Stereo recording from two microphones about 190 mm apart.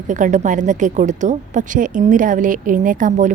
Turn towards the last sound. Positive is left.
turn(degrees=-40)  # may be behind; listen again after turning